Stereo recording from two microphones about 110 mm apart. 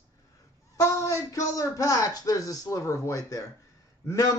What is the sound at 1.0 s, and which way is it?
A man's voice, 30° left (ahead or behind).